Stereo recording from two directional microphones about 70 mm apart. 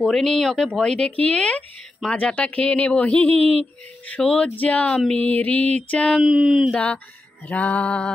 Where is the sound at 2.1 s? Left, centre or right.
Centre.